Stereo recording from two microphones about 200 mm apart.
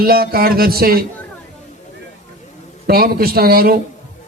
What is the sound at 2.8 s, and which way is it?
Speech, 50° right (ahead or behind).